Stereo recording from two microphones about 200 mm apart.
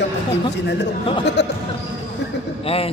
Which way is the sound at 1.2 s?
60° left (ahead or behind).